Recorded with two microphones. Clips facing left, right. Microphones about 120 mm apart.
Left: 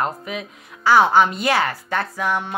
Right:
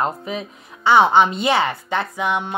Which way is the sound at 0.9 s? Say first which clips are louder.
Right 1 dB; 25° right (ahead or behind).